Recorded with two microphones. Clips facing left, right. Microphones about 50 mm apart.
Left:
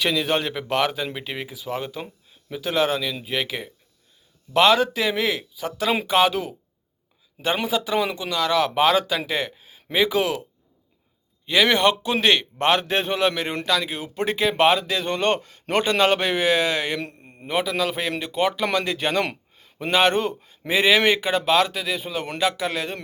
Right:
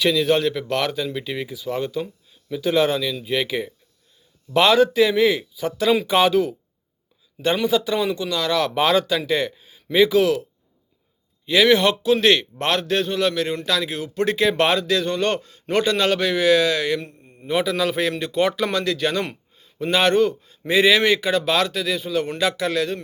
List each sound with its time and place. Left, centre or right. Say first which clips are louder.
0.1 s speech: right 4 dB; centre
2.0 s a sound: right 7 dB; centre
2.6 s speech: right 3 dB; centre
11.4 s speech: right 2 dB; centre
13.7 s speech: even; centre; by 15.4 s left
15.4 s speech: right 2 dB; left
17.0 s a man's voice: left 3 dB; left
17.5 s speech: right 2 dB; centre
18.6 s speech: right 1 dB; left
19.5 s a sound: right 3 dB; left
19.9 s speech: right 2 dB; centre